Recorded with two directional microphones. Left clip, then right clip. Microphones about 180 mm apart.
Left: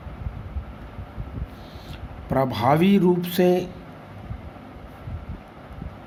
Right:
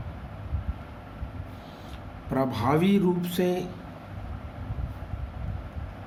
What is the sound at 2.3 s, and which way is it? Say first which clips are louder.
Speech: left 5 dB; 40° left (ahead or behind).